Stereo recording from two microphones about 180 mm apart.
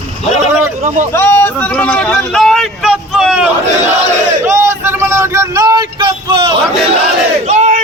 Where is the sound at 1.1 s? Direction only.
15° left (ahead or behind); by 3.5 s 5° right (ahead or behind).